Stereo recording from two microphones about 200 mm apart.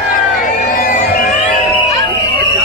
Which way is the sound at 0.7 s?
40° left (ahead or behind).